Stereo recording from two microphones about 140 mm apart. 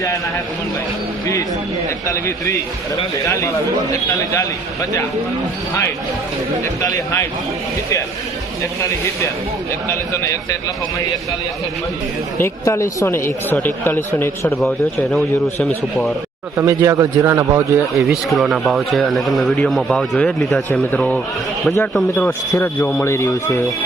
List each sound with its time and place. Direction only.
2.0 s a man's voice: 20° left (ahead or behind)
6.8 s a man's voice: 20° left (ahead or behind)
8.8 s a man's voice: 20° left (ahead or behind)
12.4 s speech: 20° left (ahead or behind)
14.6 s speech: centre (ahead or behind)
16.6 s a man's voice: 20° right (ahead or behind)
17.9 s a man's voice: centre (ahead or behind); by 23.6 s 20° left (ahead or behind)